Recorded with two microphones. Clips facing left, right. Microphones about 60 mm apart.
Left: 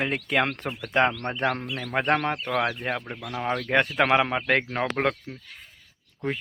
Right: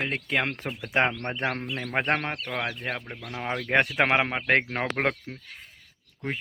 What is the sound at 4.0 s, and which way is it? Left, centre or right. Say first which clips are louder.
Speech: left 2 dB; centre.